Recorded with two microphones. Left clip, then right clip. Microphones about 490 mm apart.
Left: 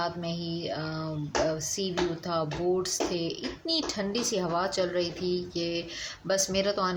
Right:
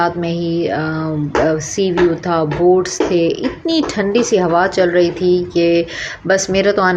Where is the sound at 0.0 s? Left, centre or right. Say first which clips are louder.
Right 15 dB; left.